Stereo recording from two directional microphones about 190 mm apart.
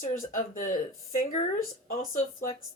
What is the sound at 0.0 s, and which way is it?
A woman's voice, 45° left (ahead or behind).